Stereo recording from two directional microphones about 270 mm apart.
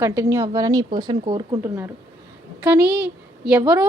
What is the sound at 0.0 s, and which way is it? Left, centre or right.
A woman's voice, centre.